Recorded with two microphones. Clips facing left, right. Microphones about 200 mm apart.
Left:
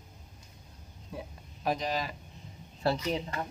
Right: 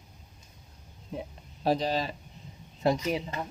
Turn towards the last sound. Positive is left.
turn(degrees=-10)  # may be behind; listen again after turning